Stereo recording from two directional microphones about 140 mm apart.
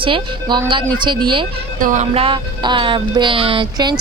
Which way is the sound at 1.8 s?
65° right (ahead or behind).